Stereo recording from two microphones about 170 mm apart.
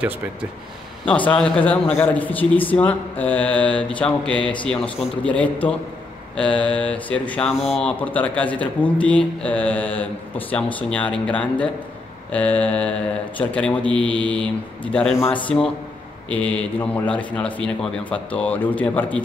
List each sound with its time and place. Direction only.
1.0 s speech: 30° left (ahead or behind)
1.3 s speech: 5° left (ahead or behind)